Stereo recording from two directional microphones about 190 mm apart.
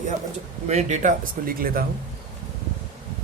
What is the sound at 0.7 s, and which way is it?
A man's voice, 35° right (ahead or behind).